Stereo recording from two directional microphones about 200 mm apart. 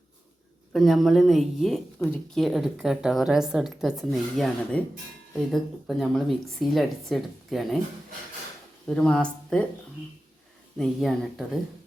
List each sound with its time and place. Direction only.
0.7 s a woman's voice: centre (ahead or behind)
8.9 s a woman's voice: 5° left (ahead or behind)
10.8 s a woman's voice: centre (ahead or behind)